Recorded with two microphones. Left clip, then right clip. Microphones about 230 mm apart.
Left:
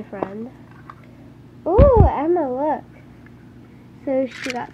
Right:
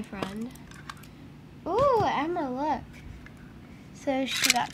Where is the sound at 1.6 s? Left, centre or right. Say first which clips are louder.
Left 9 dB; right.